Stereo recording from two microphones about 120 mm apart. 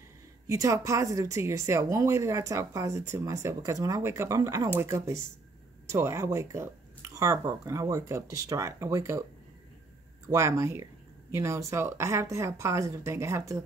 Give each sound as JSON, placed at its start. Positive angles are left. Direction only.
{"t": 0.5, "sound": "a woman's voice", "side_deg": -25}
{"t": 10.3, "sound": "a woman's voice", "side_deg": -25}